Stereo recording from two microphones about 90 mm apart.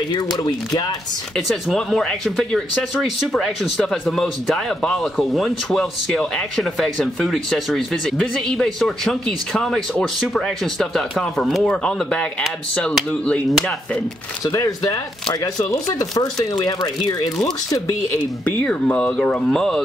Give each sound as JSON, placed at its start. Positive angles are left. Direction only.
{"t": 0.1, "sound": "speech", "side_deg": 50}
{"t": 1.3, "sound": "speech", "side_deg": 5}
{"t": 14.4, "sound": "speech", "side_deg": 40}
{"t": 18.6, "sound": "speech", "side_deg": 10}